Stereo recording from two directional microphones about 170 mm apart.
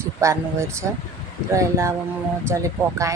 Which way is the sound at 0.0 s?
15° right (ahead or behind).